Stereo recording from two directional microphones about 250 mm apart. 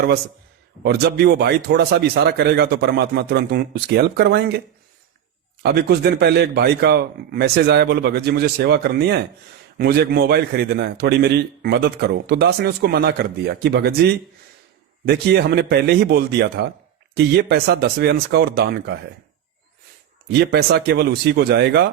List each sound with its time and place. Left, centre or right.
0.9 s a man's voice: right
5.6 s a man's voice: right
20.4 s a man's voice: right